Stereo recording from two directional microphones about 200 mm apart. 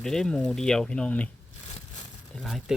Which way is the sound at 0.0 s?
Centre (ahead or behind).